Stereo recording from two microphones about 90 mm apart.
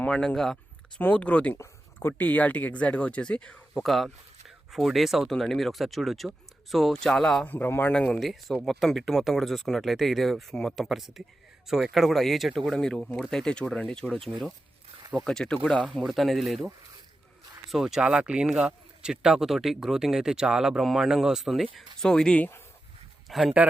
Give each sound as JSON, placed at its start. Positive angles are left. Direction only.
{"t": 0.0, "sound": "speech", "side_deg": 10}
{"t": 0.9, "sound": "speech", "side_deg": 15}
{"t": 3.8, "sound": "speech", "side_deg": 0}
{"t": 7.4, "sound": "a man's voice", "side_deg": 20}
{"t": 7.9, "sound": "speech", "side_deg": 10}
{"t": 12.7, "sound": "speech", "side_deg": 5}
{"t": 14.3, "sound": "speech", "side_deg": 0}
{"t": 17.7, "sound": "speech", "side_deg": -5}
{"t": 23.3, "sound": "speech", "side_deg": 0}